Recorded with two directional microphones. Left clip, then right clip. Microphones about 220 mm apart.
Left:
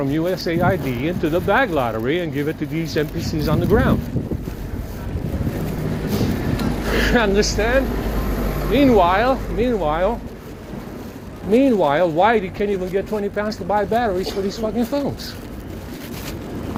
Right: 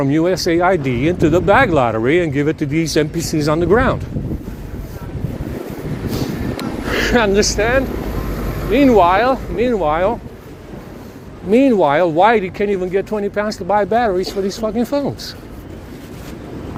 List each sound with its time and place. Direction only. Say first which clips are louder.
0.0 s speech: right 5 dB; 70° right (ahead or behind)
6.9 s speech: right 3 dB; 75° right (ahead or behind)
11.5 s speech: right 3 dB; 70° right (ahead or behind)